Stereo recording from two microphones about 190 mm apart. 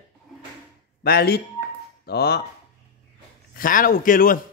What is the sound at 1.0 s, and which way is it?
Speech, 55° left (ahead or behind).